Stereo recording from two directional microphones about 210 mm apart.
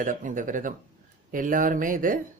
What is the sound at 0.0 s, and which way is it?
Speech, 40° right (ahead or behind).